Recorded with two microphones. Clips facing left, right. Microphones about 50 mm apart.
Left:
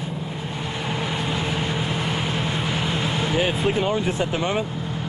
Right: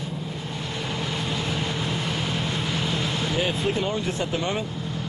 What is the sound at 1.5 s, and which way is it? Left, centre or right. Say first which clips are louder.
Vehicle: left 2 dB; centre.